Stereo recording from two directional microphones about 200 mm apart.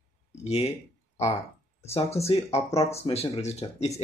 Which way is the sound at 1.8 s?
30° left (ahead or behind).